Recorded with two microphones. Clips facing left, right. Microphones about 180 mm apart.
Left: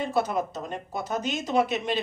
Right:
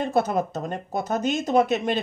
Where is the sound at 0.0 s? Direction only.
50° right (ahead or behind).